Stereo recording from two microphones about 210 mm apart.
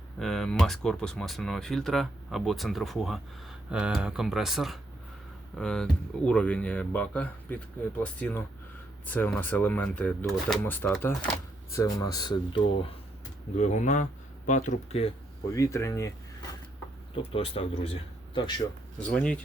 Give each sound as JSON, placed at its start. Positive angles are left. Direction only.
{"t": 0.2, "sound": "speech", "side_deg": 0}
{"t": 13.6, "sound": "speech", "side_deg": 35}
{"t": 15.5, "sound": "speech", "side_deg": 15}
{"t": 17.3, "sound": "speech", "side_deg": 25}
{"t": 18.9, "sound": "speech", "side_deg": 5}